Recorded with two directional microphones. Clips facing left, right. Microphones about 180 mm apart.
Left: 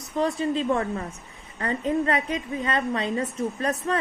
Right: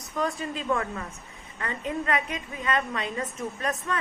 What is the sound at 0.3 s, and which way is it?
A woman's voice, 30° left (ahead or behind).